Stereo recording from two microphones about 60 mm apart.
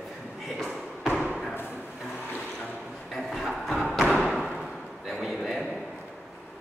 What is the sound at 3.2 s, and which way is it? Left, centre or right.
Music, centre.